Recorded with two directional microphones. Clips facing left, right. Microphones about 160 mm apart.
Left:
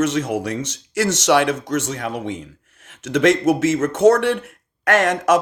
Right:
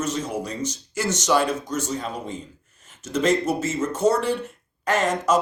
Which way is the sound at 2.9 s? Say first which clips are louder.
Left 5 dB; 90° left.